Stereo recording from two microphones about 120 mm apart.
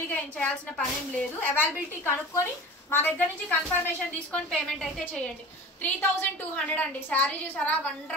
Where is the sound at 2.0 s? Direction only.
20° left (ahead or behind).